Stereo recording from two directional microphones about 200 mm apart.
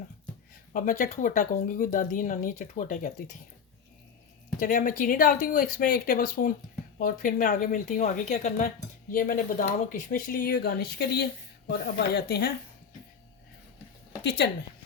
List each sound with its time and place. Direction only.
0.7 s speech: 40° left (ahead or behind)
4.6 s speech: 45° left (ahead or behind)
14.3 s a woman's voice: 55° left (ahead or behind)